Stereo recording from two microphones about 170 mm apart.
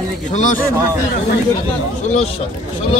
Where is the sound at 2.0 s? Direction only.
45° left (ahead or behind).